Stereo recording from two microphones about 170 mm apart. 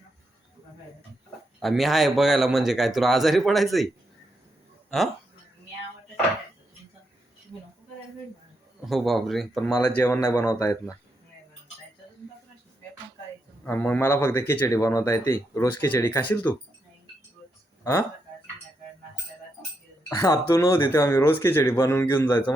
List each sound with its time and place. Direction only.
1.6 s speech: centre (ahead or behind)
8.9 s speech: centre (ahead or behind); by 10.9 s 20° left (ahead or behind)
13.7 s speech: 10° left (ahead or behind)
20.1 s speech: 20° left (ahead or behind)